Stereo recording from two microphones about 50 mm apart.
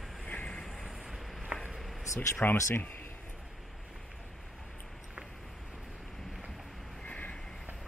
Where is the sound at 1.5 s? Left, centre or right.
Right.